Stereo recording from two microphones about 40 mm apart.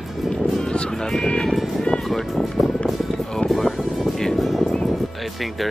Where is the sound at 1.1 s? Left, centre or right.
Centre.